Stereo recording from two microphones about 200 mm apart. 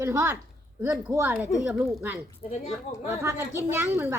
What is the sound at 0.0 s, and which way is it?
A woman's voice, 15° right (ahead or behind).